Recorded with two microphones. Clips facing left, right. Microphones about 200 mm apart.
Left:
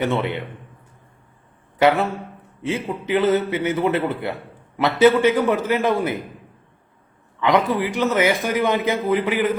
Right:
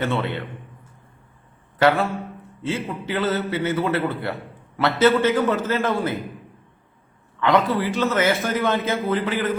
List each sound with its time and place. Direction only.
0.0 s a man's voice: 15° left (ahead or behind)
1.8 s a man's voice: 15° left (ahead or behind)
7.3 s a man's voice: 15° left (ahead or behind)